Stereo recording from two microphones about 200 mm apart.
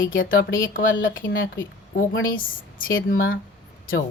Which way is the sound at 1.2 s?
60° left (ahead or behind).